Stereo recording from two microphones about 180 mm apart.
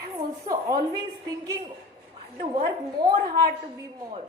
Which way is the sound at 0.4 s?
20° right (ahead or behind).